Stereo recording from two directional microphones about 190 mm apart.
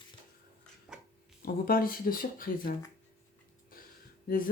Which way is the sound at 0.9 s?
5° right (ahead or behind).